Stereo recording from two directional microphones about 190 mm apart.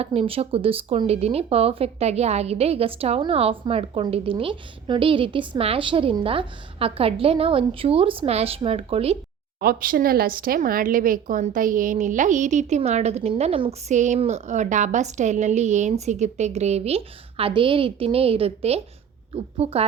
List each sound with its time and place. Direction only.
0.0 s speech: 30° right (ahead or behind)
9.6 s speech: 50° right (ahead or behind); by 19.8 s 30° right (ahead or behind)